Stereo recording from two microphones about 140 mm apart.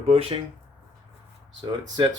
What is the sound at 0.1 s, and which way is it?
Speech, 40° right (ahead or behind).